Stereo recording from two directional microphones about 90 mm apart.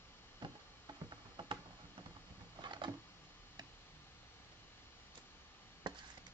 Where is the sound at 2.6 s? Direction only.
60° right (ahead or behind).